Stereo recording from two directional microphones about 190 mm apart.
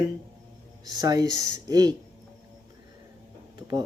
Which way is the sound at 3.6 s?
20° right (ahead or behind).